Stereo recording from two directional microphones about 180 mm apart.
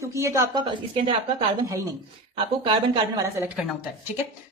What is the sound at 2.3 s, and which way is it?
Speech, 25° right (ahead or behind).